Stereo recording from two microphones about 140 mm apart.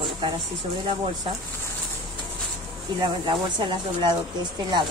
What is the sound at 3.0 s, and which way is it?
Speech, 30° right (ahead or behind).